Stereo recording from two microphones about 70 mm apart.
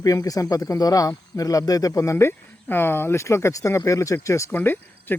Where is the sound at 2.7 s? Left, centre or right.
Left.